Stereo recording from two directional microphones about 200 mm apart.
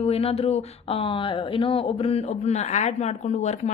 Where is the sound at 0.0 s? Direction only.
30° left (ahead or behind).